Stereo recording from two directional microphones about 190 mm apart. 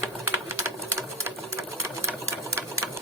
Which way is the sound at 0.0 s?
15° right (ahead or behind).